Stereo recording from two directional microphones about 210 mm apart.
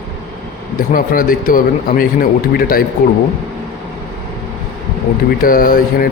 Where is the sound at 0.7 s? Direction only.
40° left (ahead or behind).